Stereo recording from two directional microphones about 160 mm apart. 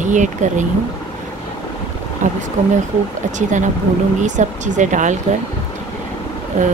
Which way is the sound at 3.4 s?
50° right (ahead or behind).